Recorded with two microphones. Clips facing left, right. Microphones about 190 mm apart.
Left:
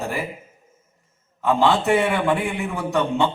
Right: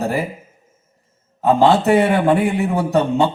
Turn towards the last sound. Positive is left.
turn(degrees=-40)  # may be behind; listen again after turning